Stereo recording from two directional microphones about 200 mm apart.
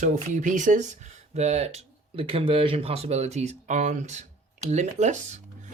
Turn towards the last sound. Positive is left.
turn(degrees=-35)  # may be behind; listen again after turning